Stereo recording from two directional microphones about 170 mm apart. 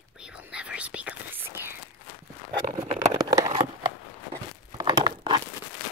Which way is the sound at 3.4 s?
40° right (ahead or behind).